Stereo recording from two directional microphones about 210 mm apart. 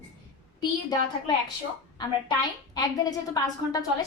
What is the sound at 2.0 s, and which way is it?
A woman's voice, 20° left (ahead or behind).